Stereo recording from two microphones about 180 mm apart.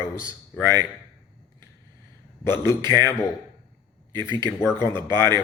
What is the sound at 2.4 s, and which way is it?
Speech, 15° left (ahead or behind).